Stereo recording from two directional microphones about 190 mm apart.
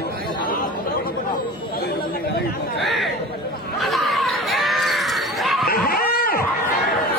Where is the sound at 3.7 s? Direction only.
Centre (ahead or behind).